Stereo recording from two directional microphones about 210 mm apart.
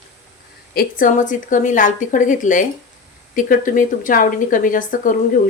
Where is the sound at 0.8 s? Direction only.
40° left (ahead or behind).